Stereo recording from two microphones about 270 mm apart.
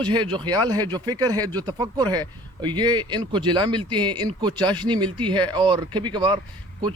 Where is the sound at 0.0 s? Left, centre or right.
Centre.